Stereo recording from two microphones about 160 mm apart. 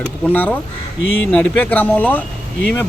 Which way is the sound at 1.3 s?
10° left (ahead or behind).